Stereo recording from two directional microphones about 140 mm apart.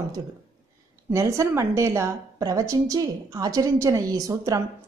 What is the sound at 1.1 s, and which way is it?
A woman's voice, 20° right (ahead or behind).